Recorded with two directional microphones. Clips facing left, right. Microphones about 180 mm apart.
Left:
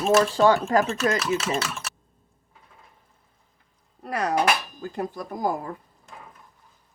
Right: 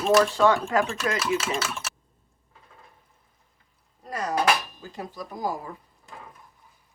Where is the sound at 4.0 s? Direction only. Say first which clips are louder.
Left 4 dB; 65° left (ahead or behind).